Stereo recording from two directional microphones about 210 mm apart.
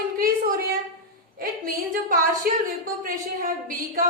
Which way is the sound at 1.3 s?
45° right (ahead or behind).